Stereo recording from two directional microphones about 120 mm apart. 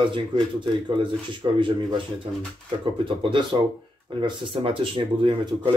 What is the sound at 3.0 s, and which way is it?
Speech, 45° right (ahead or behind).